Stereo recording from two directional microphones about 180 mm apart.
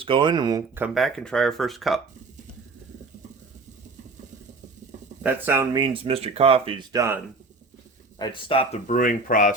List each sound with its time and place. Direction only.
0.0 s speech: 25° right (ahead or behind)
0.9 s speech: centre (ahead or behind)
5.2 s speech: 15° right (ahead or behind)
8.2 s speech: 30° left (ahead or behind)
8.9 s speech: 50° left (ahead or behind)